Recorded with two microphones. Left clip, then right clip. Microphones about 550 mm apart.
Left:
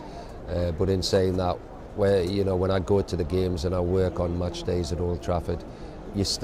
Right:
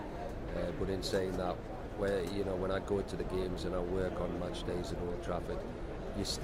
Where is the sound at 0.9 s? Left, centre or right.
Left.